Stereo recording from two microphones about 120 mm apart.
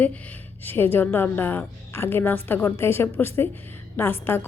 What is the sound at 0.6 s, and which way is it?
A woman's voice, 15° left (ahead or behind).